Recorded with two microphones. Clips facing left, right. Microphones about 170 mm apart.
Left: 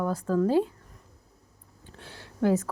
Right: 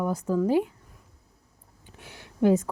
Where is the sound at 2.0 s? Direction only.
15° right (ahead or behind).